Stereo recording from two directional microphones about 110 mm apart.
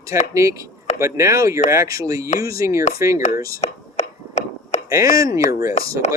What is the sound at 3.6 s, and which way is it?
Whispering, 90° left.